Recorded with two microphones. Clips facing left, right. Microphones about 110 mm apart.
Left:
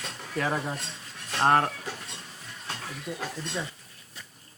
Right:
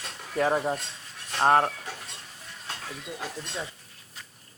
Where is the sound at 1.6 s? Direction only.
15° right (ahead or behind).